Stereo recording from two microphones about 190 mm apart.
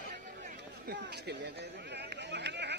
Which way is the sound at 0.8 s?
60° right (ahead or behind).